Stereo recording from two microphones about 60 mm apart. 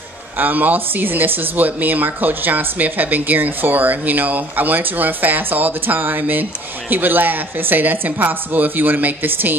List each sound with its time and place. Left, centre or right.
0.4 s speech: right